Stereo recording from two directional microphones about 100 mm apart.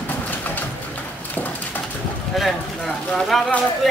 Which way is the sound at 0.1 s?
20° left (ahead or behind).